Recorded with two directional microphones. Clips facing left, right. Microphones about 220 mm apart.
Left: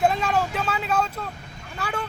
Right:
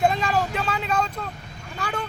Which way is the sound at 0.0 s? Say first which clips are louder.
Even; 5° left (ahead or behind).